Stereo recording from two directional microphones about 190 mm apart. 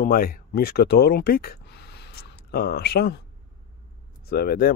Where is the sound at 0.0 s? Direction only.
50° left (ahead or behind).